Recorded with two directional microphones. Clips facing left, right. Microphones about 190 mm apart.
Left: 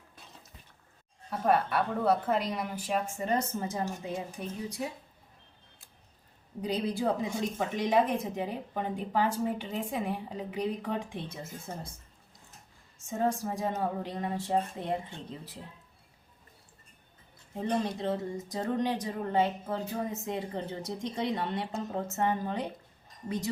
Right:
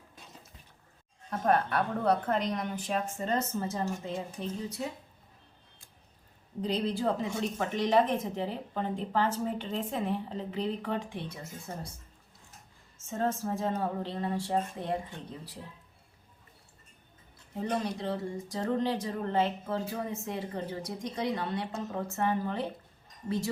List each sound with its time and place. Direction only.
1.3 s speech: 5° left (ahead or behind)
6.6 s speech: 10° left (ahead or behind)
13.1 s speech: 15° left (ahead or behind)
17.6 s speech: 20° left (ahead or behind)